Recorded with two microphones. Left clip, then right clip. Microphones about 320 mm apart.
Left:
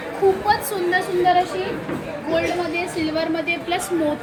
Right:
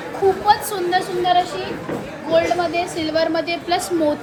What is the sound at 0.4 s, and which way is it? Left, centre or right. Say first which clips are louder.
Speech: right 3 dB; centre.